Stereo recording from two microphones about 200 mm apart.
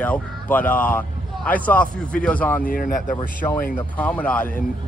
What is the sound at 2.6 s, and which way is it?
Speech, 45° left (ahead or behind).